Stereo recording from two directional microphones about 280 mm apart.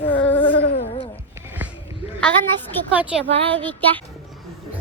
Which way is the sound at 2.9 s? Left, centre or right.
Centre.